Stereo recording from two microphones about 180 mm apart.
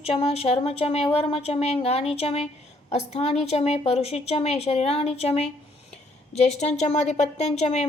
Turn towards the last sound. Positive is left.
turn(degrees=40)  # may be behind; listen again after turning